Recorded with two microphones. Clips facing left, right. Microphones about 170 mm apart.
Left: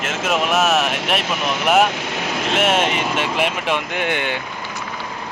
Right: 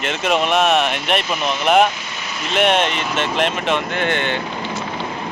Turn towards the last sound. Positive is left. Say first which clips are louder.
# right 2 dB
turn(degrees=10)  # may be behind; listen again after turning